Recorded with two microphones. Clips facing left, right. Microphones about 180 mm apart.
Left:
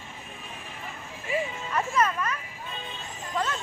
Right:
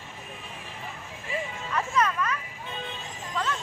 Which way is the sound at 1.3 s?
20° left (ahead or behind).